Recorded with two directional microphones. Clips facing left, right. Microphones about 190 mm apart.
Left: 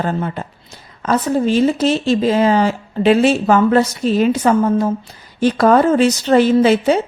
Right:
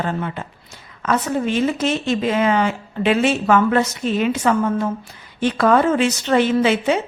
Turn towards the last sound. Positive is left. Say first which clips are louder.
# left 5 dB
turn(degrees=35)  # may be behind; listen again after turning